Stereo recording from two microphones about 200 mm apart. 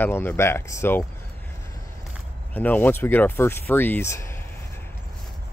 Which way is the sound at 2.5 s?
10° left (ahead or behind).